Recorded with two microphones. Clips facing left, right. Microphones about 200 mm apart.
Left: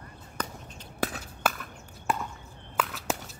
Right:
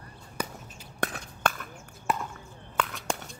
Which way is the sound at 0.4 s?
10° right (ahead or behind).